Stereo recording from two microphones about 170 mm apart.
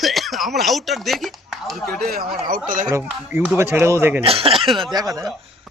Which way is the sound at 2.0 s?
60° right (ahead or behind).